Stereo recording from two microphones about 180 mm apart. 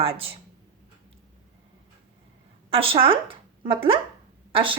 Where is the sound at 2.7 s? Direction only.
30° right (ahead or behind).